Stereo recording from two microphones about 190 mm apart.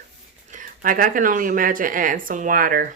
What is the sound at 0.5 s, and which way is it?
Speech, 45° right (ahead or behind).